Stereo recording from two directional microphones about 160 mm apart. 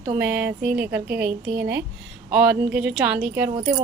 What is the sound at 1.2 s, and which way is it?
Speech, 70° right (ahead or behind).